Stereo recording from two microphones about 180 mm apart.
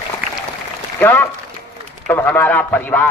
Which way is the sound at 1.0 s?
10° left (ahead or behind).